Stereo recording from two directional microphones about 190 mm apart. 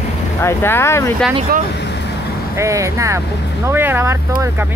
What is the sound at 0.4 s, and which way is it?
Speech, 15° left (ahead or behind).